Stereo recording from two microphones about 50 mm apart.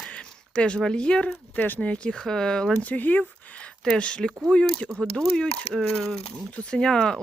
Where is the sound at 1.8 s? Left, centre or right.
Left.